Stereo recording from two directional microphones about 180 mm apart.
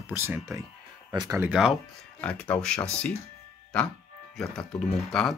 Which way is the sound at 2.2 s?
5° left (ahead or behind).